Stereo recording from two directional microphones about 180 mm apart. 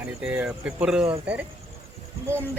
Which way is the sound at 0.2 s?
5° right (ahead or behind).